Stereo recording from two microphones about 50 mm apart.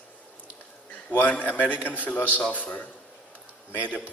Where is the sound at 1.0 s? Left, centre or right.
Left.